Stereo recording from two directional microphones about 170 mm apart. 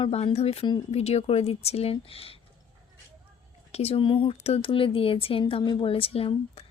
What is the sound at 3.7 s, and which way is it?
A woman's voice, 35° left (ahead or behind).